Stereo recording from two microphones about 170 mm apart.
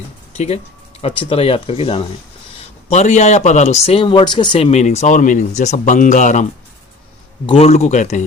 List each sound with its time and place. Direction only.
0.3 s speech: 40° left (ahead or behind)
7.4 s speech: 35° left (ahead or behind)